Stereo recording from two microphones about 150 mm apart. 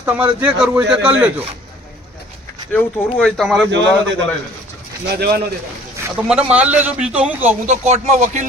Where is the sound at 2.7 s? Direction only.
5° left (ahead or behind).